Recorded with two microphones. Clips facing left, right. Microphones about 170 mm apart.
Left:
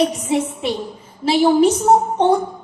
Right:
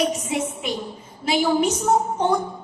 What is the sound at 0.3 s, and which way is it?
A woman's voice, 30° left (ahead or behind).